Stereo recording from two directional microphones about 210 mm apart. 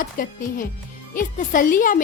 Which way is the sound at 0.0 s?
40° left (ahead or behind).